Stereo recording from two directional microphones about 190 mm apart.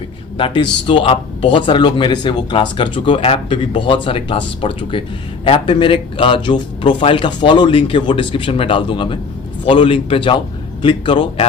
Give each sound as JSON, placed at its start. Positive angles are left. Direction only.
{"t": 0.3, "sound": "speech", "side_deg": 25}